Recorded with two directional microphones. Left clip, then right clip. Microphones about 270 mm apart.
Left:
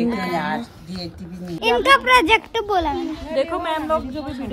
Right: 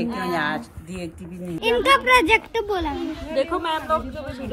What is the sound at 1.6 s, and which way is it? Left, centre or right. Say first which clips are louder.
Speech: left 3 dB; centre.